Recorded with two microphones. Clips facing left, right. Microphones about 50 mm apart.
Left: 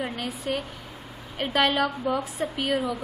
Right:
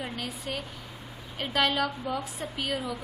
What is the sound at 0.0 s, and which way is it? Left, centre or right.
A woman's voice, centre.